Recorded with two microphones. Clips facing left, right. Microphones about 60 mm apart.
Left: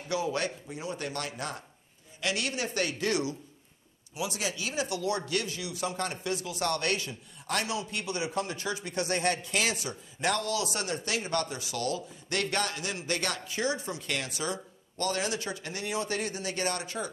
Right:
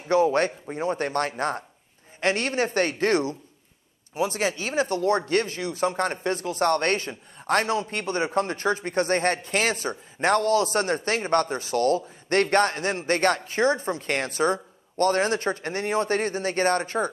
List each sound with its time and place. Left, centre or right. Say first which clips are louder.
0.1 s speech: right 10 dB; right